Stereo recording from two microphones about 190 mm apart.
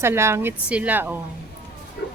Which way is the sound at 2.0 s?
60° left (ahead or behind).